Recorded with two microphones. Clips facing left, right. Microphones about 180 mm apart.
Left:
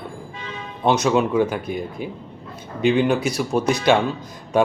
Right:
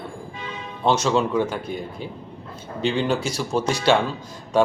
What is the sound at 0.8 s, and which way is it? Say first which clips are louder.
Speech: left 2 dB; 15° left (ahead or behind).